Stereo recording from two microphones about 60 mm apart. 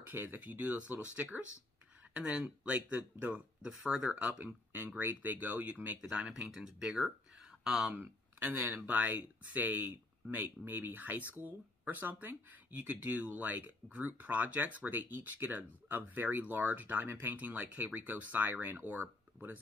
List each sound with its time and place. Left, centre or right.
0.0 s speech: right
2.1 s speech: centre
4.1 s speech: right
5.9 s speech: centre
7.9 s speech: right